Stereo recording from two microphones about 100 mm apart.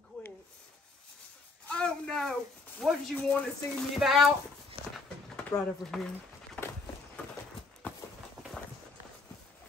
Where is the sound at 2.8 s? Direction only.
Centre (ahead or behind).